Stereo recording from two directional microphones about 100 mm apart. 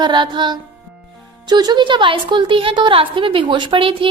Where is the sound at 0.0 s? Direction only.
50° right (ahead or behind).